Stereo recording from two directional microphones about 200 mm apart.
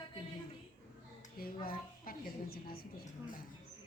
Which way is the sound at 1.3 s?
45° left (ahead or behind).